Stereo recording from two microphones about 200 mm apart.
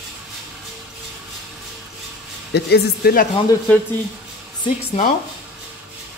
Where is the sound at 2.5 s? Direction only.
55° left (ahead or behind).